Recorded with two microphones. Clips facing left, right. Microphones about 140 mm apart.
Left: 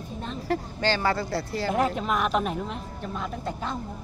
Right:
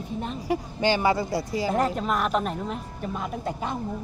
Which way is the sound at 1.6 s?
Centre (ahead or behind).